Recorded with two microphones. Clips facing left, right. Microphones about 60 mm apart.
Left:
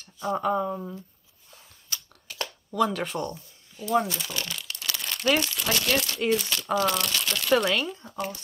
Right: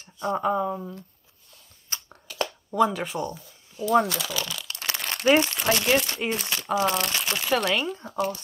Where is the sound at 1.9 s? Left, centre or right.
Right.